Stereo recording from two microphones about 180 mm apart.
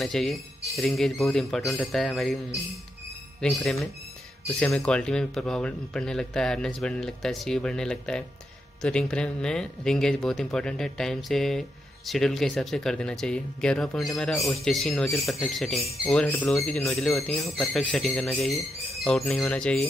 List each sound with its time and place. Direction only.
0.0 s speech: centre (ahead or behind)